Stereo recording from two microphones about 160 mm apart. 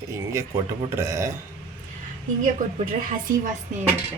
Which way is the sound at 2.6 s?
55° right (ahead or behind).